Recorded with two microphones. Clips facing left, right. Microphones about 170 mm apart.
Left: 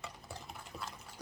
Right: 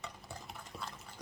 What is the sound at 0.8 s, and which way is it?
Water, 5° left (ahead or behind).